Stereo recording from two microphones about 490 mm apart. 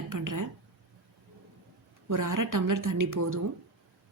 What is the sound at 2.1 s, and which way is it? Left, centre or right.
A woman's voice, right.